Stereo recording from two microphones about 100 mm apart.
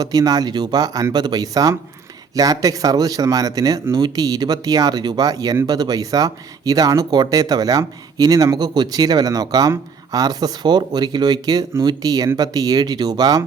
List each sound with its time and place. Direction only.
0.0 s speech: 40° right (ahead or behind)